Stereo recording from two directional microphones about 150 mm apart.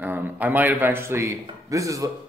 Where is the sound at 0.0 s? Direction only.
10° right (ahead or behind).